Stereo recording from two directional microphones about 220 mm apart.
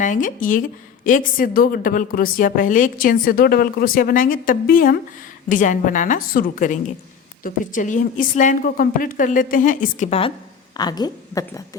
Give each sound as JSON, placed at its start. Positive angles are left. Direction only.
{"t": 0.0, "sound": "a woman's voice", "side_deg": 35}